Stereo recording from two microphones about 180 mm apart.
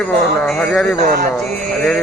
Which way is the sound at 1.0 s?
55° right (ahead or behind).